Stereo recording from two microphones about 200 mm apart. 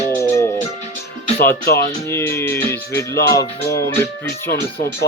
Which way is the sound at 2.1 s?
10° left (ahead or behind).